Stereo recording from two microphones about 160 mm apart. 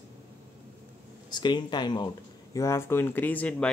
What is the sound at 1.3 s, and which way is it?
Speech, 25° left (ahead or behind).